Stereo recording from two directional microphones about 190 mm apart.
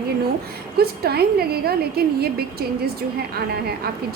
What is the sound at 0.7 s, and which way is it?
A woman's voice, 55° right (ahead or behind).